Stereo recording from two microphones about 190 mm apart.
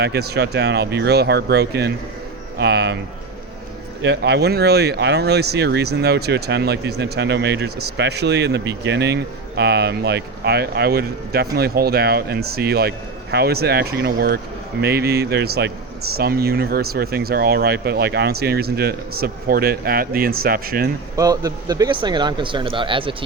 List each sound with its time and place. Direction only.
0.0 s speech: 60° right (ahead or behind)
4.0 s speech: 65° right (ahead or behind)
21.2 s speech: 20° right (ahead or behind)